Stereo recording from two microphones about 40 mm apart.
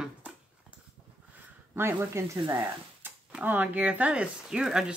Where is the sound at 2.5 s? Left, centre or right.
Right.